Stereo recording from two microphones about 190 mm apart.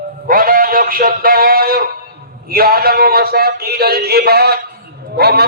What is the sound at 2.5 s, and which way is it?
A man's voice, 55° right (ahead or behind).